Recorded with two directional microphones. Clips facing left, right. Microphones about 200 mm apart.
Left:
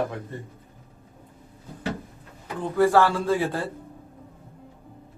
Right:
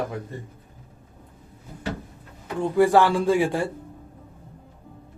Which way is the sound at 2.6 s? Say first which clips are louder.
Right 2 dB; 15° right (ahead or behind).